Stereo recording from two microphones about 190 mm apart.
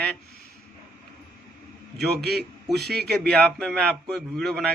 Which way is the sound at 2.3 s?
Centre (ahead or behind).